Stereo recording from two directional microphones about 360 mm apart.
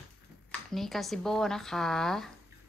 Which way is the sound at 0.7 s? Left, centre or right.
Centre.